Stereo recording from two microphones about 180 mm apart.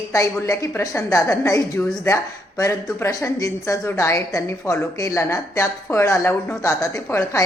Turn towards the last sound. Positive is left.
turn(degrees=15)  # may be behind; listen again after turning